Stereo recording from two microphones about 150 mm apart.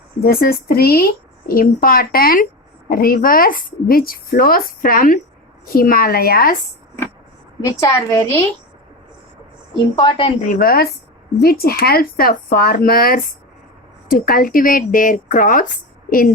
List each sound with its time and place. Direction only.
0.2 s a woman's voice: 90° left
7.6 s a woman's voice: 20° left (ahead or behind)
9.9 s a woman's voice: 35° left (ahead or behind)
10.5 s a woman's voice: 75° left (ahead or behind)
11.3 s speech: 90° left; by 15.6 s 65° left (ahead or behind)